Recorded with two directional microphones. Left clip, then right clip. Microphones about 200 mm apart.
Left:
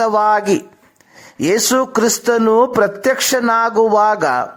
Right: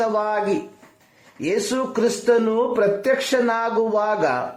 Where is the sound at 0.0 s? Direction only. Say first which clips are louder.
Left 8 dB; 40° left (ahead or behind).